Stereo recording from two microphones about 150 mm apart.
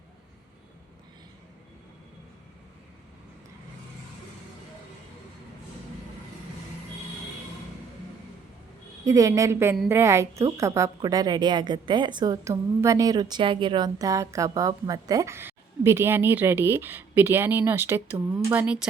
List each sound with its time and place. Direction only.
9.0 s a woman's voice: 20° right (ahead or behind)